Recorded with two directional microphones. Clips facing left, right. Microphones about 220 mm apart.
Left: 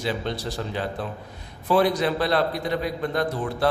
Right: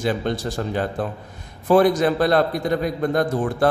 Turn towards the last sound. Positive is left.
turn(degrees=-50)  # may be behind; listen again after turning